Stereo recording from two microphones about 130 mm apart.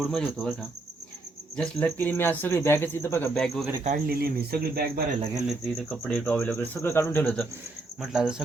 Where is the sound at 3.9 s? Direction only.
60° right (ahead or behind).